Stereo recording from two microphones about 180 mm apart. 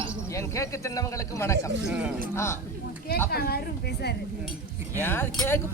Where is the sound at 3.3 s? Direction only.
60° left (ahead or behind).